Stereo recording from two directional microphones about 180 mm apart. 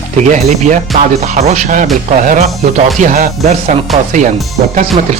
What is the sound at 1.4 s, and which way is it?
Speech, 40° right (ahead or behind).